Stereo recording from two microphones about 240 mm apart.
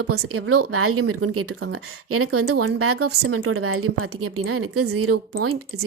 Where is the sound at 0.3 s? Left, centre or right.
Right.